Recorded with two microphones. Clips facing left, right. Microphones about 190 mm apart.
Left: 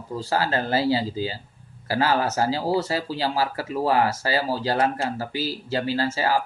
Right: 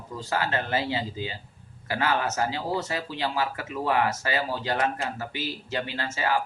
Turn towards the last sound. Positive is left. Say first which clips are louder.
# left 5 dB
turn(degrees=35)  # may be behind; listen again after turning